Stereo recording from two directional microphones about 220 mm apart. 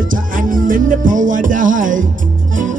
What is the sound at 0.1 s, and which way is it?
Music, 40° right (ahead or behind).